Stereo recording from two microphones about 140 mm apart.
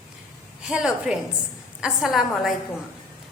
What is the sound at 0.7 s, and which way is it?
A woman's voice, 5° right (ahead or behind).